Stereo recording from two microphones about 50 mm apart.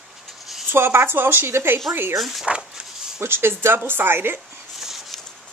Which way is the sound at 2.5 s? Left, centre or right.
Right.